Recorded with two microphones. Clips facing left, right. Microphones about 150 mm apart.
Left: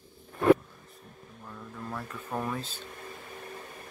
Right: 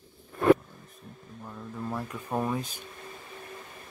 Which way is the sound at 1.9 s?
15° right (ahead or behind).